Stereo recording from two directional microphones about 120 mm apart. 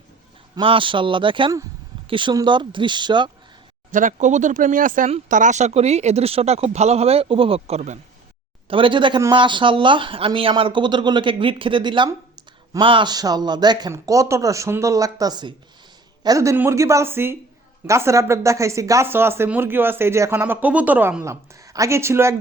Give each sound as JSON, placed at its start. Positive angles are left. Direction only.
{"t": 0.6, "sound": "speech", "side_deg": -45}
{"t": 3.9, "sound": "speech", "side_deg": -90}
{"t": 8.6, "sound": "speech", "side_deg": -45}
{"t": 21.2, "sound": "speech", "side_deg": -25}